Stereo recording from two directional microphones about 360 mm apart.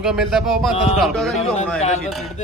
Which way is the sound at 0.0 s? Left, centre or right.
Centre.